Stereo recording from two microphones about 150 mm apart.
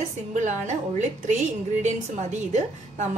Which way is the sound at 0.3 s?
55° right (ahead or behind).